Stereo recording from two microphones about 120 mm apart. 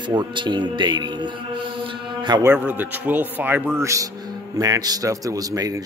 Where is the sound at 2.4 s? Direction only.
15° right (ahead or behind).